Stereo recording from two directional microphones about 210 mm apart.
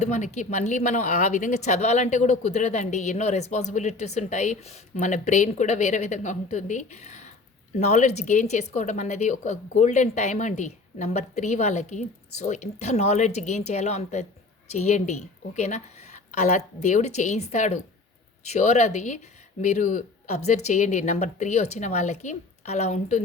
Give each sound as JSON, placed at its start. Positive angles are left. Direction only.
{"t": 0.0, "sound": "a woman's voice", "side_deg": 35}